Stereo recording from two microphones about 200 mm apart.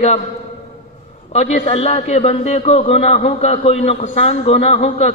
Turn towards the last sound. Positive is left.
turn(degrees=30)  # may be behind; listen again after turning